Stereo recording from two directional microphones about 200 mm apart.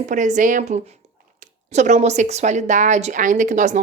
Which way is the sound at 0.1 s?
40° right (ahead or behind).